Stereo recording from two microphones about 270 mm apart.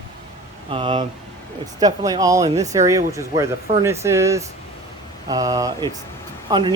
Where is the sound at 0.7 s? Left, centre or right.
Centre.